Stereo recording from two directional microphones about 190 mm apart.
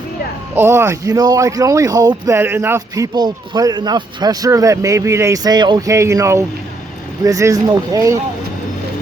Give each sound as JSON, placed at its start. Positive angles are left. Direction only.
{"t": 0.5, "sound": "speech", "side_deg": -15}